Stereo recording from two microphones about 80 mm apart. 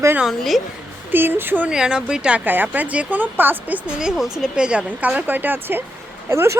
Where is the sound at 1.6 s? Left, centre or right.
Centre.